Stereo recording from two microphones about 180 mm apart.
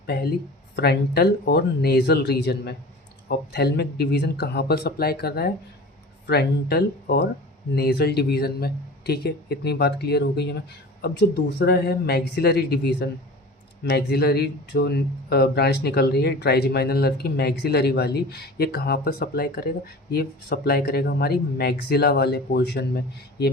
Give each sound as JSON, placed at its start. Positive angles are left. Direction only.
{"t": 0.0, "sound": "speech", "side_deg": 60}